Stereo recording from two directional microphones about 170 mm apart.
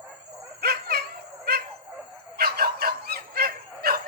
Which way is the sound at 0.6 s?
70° right (ahead or behind).